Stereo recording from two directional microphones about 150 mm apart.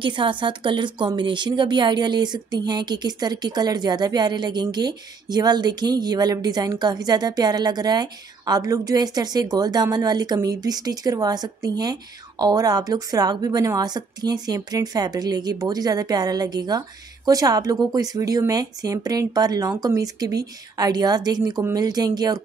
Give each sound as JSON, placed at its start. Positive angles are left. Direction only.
{"t": 0.0, "sound": "speech", "side_deg": -35}